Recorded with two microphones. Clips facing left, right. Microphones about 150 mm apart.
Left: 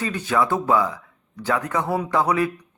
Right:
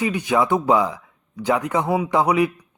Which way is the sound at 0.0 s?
15° right (ahead or behind).